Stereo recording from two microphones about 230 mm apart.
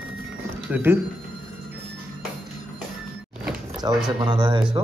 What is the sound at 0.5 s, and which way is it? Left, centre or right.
Cash register, centre.